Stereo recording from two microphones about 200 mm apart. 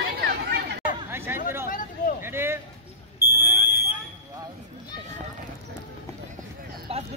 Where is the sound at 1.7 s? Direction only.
45° left (ahead or behind).